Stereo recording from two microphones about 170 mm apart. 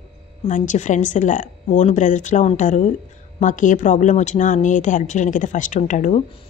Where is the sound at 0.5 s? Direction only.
45° left (ahead or behind).